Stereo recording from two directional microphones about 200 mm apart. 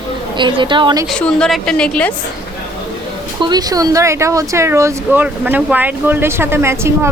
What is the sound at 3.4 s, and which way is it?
Speech, 20° right (ahead or behind).